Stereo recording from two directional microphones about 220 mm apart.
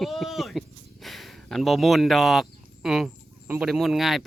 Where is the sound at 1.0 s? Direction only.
Centre (ahead or behind).